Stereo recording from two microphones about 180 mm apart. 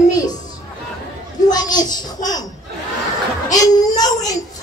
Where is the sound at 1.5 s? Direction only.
20° left (ahead or behind).